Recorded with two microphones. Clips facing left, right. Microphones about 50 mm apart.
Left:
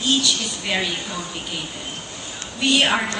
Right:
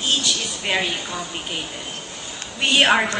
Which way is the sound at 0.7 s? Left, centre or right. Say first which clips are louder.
Right 1 dB; right.